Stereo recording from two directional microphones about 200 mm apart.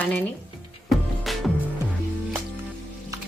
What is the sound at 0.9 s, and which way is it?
Music, centre (ahead or behind).